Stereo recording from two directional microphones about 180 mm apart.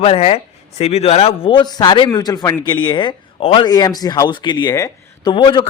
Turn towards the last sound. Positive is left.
turn(degrees=25)  # may be behind; listen again after turning